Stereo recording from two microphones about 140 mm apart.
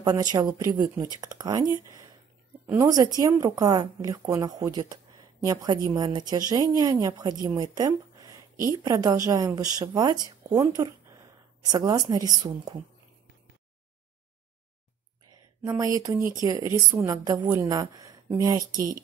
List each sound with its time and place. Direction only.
0.0 s a woman's voice: 25° right (ahead or behind)
15.6 s speech: 25° right (ahead or behind)